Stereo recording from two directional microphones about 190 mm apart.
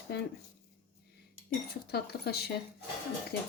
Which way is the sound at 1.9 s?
55° left (ahead or behind).